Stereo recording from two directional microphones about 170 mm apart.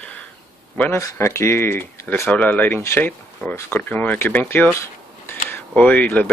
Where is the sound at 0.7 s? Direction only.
15° left (ahead or behind).